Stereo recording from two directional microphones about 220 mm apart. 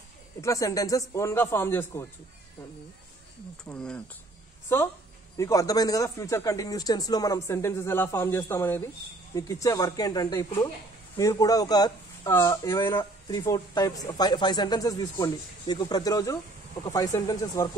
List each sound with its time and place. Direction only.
0.4 s speech: 15° left (ahead or behind)
3.6 s speech: 5° left (ahead or behind)
5.4 s speech: 15° left (ahead or behind)